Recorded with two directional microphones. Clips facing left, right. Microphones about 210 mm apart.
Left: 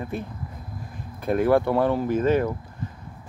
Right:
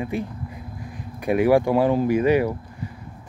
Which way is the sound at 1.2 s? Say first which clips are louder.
Right 2 dB; 10° right (ahead or behind).